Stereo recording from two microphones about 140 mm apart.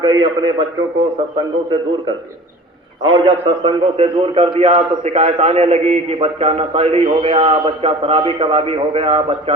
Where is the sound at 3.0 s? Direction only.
45° right (ahead or behind).